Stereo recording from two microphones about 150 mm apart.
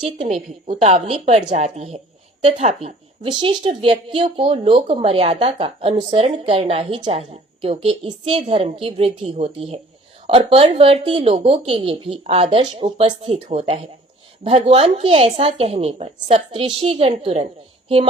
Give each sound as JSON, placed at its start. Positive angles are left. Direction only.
{"t": 0.7, "sound": "speech", "side_deg": -45}
{"t": 3.2, "sound": "speech", "side_deg": -30}